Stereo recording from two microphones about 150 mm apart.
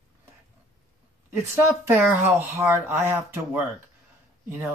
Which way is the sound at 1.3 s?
15° right (ahead or behind).